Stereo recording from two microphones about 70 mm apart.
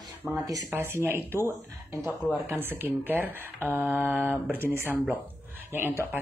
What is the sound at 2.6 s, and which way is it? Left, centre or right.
Speech, right.